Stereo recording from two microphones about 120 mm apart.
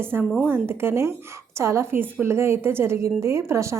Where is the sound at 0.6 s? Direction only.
20° right (ahead or behind).